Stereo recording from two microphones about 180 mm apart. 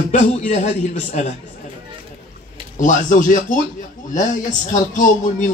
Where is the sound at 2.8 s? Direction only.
45° left (ahead or behind).